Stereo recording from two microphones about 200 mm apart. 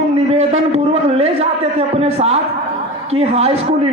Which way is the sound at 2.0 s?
30° right (ahead or behind).